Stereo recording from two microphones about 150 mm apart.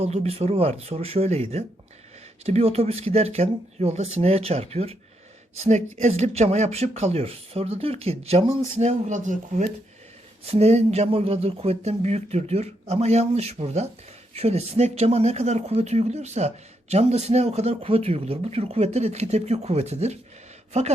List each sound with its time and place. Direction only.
0.0 s speech: 45° right (ahead or behind)
10.4 s speech: 45° right (ahead or behind)